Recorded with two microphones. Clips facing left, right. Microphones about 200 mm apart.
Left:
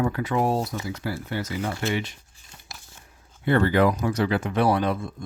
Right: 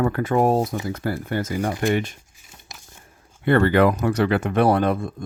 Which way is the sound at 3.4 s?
60° right (ahead or behind).